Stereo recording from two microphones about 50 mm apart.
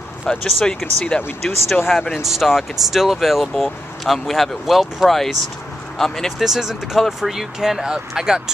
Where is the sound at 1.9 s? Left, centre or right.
Centre.